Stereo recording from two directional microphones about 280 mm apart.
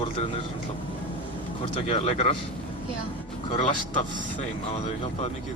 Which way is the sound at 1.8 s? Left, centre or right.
Left.